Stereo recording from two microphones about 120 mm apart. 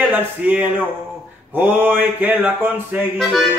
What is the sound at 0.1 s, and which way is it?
Mantra, 15° right (ahead or behind).